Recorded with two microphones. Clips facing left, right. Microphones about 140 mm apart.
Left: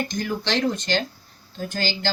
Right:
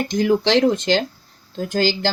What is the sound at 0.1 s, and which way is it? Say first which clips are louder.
Speech: right 9 dB; 90° right.